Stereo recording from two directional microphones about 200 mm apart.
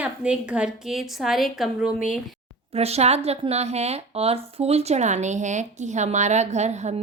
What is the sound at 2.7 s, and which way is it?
Speech, 30° right (ahead or behind).